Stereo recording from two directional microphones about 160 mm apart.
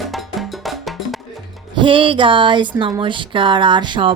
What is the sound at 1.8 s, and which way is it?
Speech, 35° right (ahead or behind).